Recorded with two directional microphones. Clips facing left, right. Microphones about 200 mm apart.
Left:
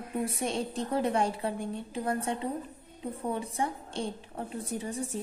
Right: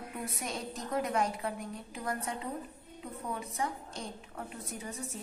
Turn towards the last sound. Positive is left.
turn(degrees=30)  # may be behind; listen again after turning